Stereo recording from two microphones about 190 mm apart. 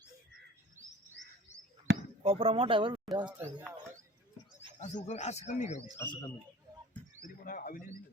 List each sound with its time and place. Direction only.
1.9 s basketball bounce: 60° right (ahead or behind)
2.2 s speech: 30° right (ahead or behind)
4.8 s speech: 40° left (ahead or behind)
6.0 s a man's voice: 20° left (ahead or behind)
7.4 s speech: 45° left (ahead or behind)